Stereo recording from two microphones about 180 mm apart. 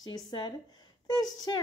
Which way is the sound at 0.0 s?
25° left (ahead or behind).